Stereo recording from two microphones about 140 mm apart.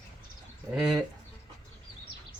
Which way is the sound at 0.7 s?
Centre (ahead or behind).